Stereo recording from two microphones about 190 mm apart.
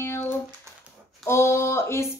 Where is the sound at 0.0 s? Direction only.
15° left (ahead or behind).